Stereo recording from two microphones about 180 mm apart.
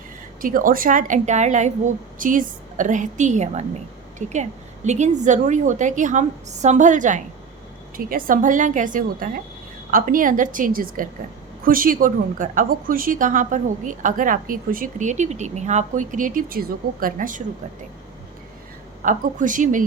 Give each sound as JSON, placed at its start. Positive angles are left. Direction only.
{"t": 0.4, "sound": "a woman's voice", "side_deg": -50}
{"t": 19.0, "sound": "a woman's voice", "side_deg": -45}